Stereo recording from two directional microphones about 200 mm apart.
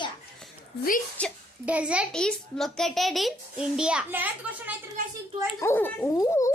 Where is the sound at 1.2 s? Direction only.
5° left (ahead or behind).